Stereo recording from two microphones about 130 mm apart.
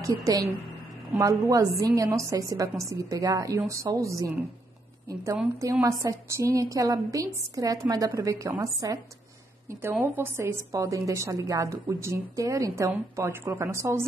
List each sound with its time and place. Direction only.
0.0 s a woman's voice: 25° right (ahead or behind)
5.8 s a woman's voice: 20° right (ahead or behind)